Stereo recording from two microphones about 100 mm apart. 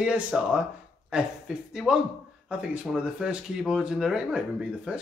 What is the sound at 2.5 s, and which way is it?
Speech, 10° right (ahead or behind).